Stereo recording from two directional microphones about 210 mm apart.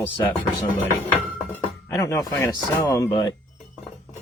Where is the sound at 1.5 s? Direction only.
10° left (ahead or behind).